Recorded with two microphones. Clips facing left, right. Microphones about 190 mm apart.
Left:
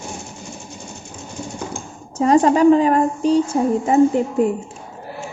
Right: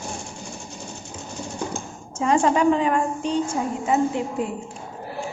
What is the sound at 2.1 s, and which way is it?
A woman's voice, 35° left (ahead or behind).